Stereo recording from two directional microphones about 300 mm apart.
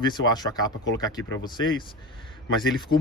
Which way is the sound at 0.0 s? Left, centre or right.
Centre.